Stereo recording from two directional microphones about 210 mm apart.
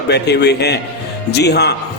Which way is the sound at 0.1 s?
50° left (ahead or behind).